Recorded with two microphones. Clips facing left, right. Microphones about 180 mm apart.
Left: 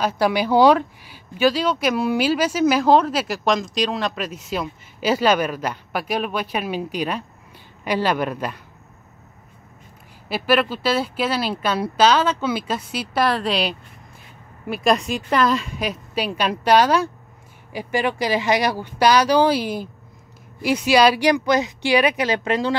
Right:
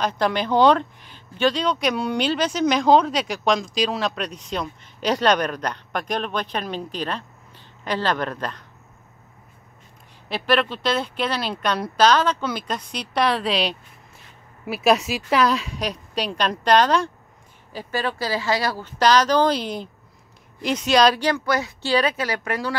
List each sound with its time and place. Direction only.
0.0 s speech: 10° left (ahead or behind)
10.2 s speech: 5° left (ahead or behind); by 22.8 s 20° left (ahead or behind)